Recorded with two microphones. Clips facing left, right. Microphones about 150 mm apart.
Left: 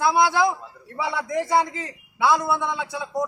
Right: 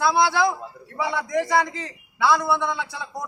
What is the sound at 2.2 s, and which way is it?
Speech, 20° left (ahead or behind).